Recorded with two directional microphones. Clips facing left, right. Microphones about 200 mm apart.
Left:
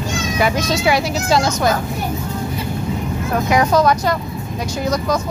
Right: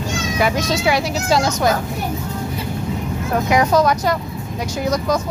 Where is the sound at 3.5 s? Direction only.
15° right (ahead or behind).